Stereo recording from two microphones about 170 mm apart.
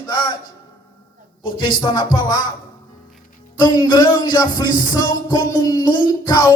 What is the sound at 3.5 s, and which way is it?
Music, 25° left (ahead or behind).